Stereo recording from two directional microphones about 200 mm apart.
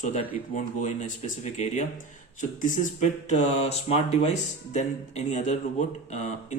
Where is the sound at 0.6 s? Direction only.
40° left (ahead or behind).